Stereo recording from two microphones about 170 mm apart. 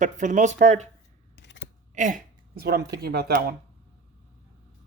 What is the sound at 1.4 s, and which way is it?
Scissors, 90° left.